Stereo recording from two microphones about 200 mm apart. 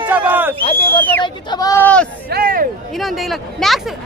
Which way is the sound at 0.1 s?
10° right (ahead or behind).